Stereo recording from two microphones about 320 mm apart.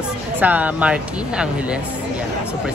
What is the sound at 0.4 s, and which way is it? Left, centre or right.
Speech, centre.